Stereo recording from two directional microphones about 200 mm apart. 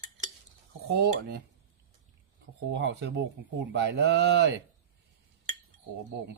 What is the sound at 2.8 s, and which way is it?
Cutlery, 65° right (ahead or behind).